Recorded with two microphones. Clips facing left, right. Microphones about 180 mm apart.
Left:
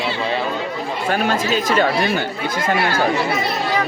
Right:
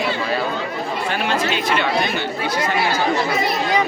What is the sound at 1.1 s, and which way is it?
Speech, 45° left (ahead or behind).